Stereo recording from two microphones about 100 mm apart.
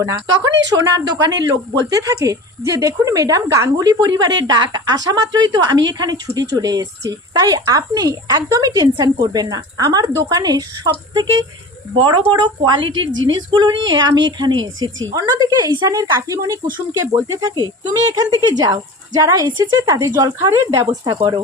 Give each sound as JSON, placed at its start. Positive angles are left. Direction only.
{"t": 0.0, "sound": "a woman's voice", "side_deg": -35}